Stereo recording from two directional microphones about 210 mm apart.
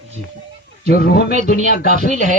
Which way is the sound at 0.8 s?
45° left (ahead or behind).